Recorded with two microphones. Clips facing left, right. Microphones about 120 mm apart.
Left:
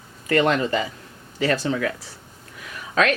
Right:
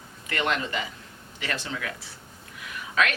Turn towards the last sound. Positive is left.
turn(degrees=40)  # may be behind; listen again after turning